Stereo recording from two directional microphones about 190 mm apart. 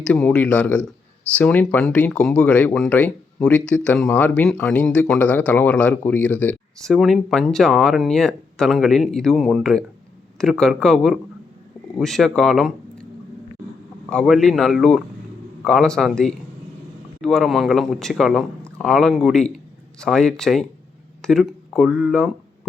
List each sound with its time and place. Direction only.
0.0 s speech: 5° left (ahead or behind)
14.1 s speech: centre (ahead or behind)